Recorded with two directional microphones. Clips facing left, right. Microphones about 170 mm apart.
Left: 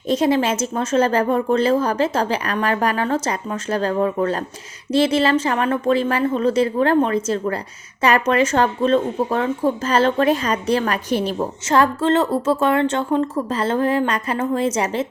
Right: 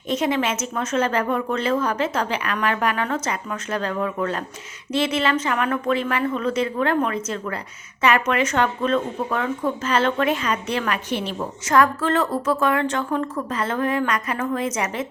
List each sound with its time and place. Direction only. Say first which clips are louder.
0.1 s speech: left 4 dB; 35° left (ahead or behind)
11.6 s a woman's voice: left 1 dB; 30° left (ahead or behind)